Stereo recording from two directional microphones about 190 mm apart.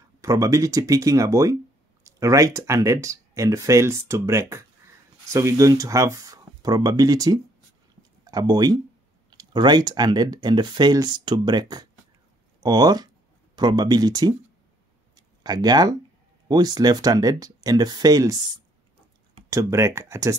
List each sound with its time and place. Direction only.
0.2 s speech: 15° right (ahead or behind)